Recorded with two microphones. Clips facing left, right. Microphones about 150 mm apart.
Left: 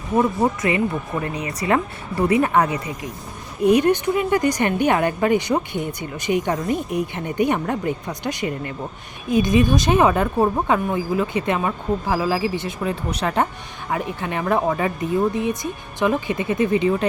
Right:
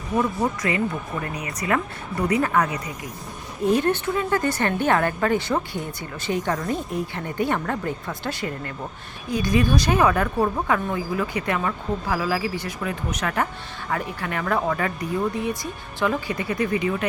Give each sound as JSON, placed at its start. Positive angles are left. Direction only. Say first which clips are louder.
{"t": 0.2, "sound": "speech", "louder": "left 4 dB", "side_deg": 25}
{"t": 3.6, "sound": "a woman's voice", "louder": "left 5 dB", "side_deg": 15}